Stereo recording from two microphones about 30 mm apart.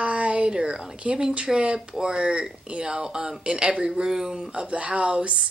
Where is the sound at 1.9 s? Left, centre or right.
Right.